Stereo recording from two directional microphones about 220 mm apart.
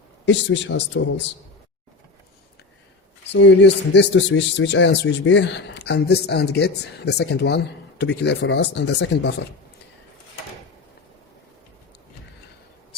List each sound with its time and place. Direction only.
0.3 s speech: 55° left (ahead or behind)
3.2 s speech: 55° left (ahead or behind)